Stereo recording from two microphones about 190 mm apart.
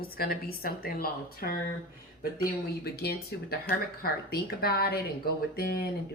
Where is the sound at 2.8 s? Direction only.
55° left (ahead or behind).